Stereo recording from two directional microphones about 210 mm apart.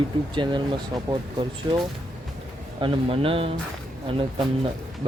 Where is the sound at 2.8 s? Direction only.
25° right (ahead or behind).